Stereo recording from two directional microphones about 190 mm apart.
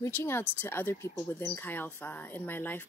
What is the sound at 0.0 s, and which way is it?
Speech, 15° left (ahead or behind).